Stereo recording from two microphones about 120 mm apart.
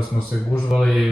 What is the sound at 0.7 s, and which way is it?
Mantra, centre (ahead or behind).